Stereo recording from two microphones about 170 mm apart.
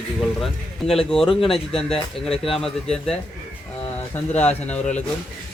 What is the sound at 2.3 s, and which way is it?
Speech, 35° left (ahead or behind).